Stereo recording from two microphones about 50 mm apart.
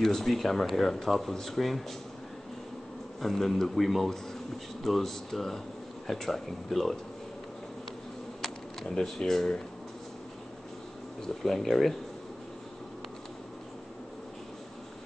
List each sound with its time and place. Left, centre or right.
0.0 s speech: centre
3.2 s speech: centre
8.4 s speech: centre
11.2 s speech: centre